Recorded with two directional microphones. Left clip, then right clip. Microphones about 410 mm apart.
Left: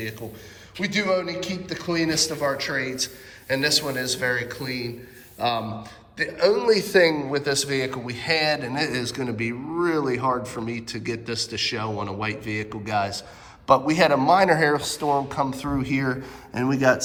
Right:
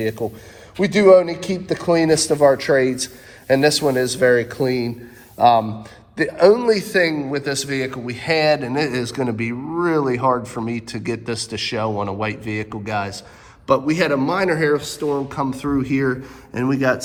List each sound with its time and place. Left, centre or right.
0.0 s a man's voice: centre